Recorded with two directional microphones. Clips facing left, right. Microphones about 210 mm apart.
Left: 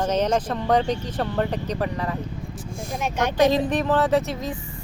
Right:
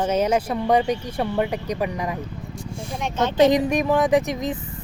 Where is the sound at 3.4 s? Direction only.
15° right (ahead or behind).